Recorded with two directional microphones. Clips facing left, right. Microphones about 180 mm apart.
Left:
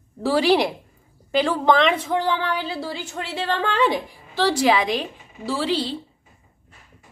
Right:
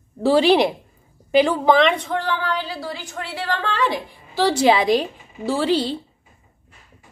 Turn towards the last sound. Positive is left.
turn(degrees=-45)  # may be behind; listen again after turning